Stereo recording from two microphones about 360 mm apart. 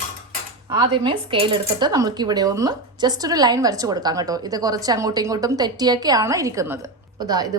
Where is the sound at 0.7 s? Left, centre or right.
Centre.